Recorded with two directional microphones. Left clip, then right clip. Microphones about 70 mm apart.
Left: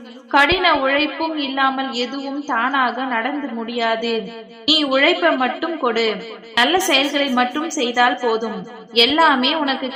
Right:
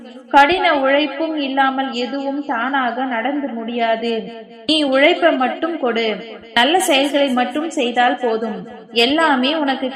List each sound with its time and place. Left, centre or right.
0.3 s a woman's voice: right